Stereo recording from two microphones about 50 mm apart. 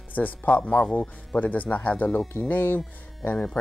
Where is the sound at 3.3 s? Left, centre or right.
Left.